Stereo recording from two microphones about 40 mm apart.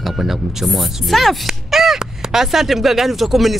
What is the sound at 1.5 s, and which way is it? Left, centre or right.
Speech, centre.